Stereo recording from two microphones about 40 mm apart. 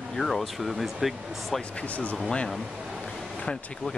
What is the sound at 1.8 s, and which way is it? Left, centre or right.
Speech, left.